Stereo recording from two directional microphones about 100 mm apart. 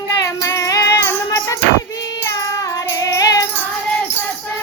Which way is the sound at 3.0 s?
35° left (ahead or behind).